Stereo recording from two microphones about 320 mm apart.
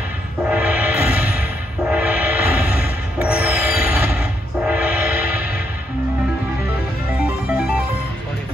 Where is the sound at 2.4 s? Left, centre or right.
Left.